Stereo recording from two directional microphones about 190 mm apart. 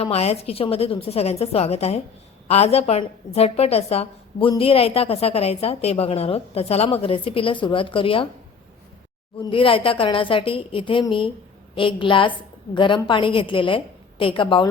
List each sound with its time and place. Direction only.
0.0 s a woman's voice: 35° left (ahead or behind)
9.4 s a woman's voice: 25° left (ahead or behind)